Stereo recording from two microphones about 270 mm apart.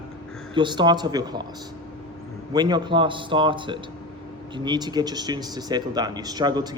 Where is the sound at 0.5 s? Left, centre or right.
Centre.